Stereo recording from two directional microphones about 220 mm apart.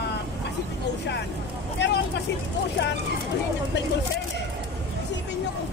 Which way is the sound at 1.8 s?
50° left (ahead or behind).